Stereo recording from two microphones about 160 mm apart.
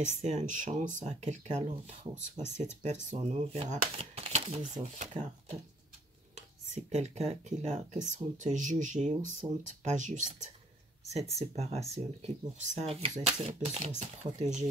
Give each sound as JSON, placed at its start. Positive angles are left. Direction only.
{"t": 0.0, "sound": "speech", "side_deg": -45}